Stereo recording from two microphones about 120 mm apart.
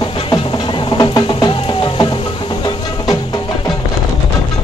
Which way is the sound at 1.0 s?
40° left (ahead or behind).